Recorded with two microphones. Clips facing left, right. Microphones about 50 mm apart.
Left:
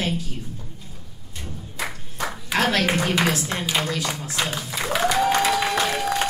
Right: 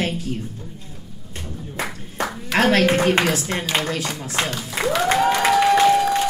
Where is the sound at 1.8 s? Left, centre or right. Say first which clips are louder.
Right 3 dB; right.